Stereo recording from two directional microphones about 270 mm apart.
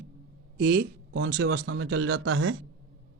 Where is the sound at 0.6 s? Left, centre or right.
Right.